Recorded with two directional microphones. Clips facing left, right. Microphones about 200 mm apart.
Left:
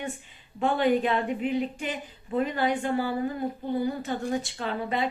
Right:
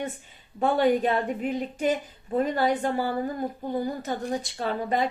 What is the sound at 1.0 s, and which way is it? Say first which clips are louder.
A woman's voice: right 1 dB; 45° right (ahead or behind).